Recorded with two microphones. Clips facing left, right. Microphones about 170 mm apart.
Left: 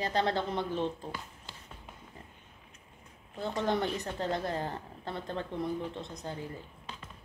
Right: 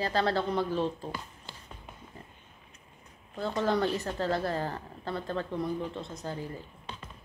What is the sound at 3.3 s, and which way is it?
A woman's voice, 20° left (ahead or behind).